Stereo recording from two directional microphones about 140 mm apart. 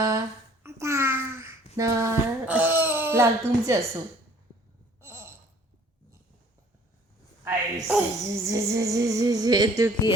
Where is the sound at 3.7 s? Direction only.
25° right (ahead or behind).